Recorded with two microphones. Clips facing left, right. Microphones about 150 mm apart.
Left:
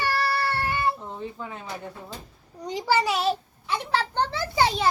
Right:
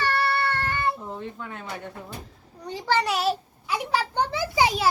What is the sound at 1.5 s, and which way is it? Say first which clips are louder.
A child's voice: even; 5° left (ahead or behind).